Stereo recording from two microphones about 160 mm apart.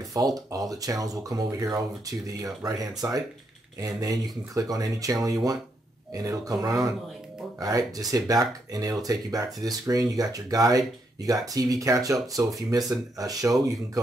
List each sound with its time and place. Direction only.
0.1 s speech: 20° right (ahead or behind)